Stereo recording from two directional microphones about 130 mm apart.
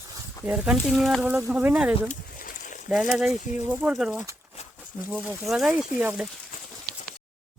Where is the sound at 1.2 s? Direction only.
15° right (ahead or behind).